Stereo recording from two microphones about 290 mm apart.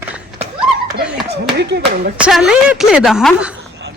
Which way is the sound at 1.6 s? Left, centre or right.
Right.